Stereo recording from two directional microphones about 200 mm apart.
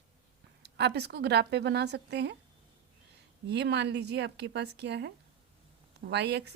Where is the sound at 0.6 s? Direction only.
55° right (ahead or behind).